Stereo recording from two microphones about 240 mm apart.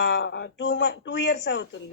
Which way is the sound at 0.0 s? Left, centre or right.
Left.